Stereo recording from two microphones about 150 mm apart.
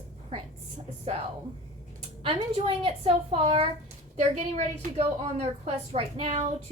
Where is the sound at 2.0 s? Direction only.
40° right (ahead or behind).